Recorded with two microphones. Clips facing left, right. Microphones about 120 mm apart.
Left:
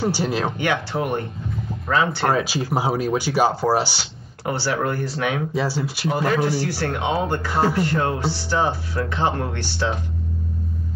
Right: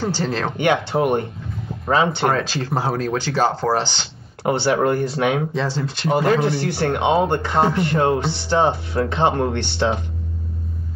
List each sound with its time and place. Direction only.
0.0 s speech: 10° left (ahead or behind)
0.6 s speech: 25° right (ahead or behind)
2.3 s speech: 10° left (ahead or behind)
4.5 s speech: 25° right (ahead or behind)
5.5 s speech: 10° left (ahead or behind)
6.0 s speech: 25° right (ahead or behind)